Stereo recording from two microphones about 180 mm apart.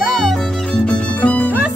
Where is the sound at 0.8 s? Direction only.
10° left (ahead or behind).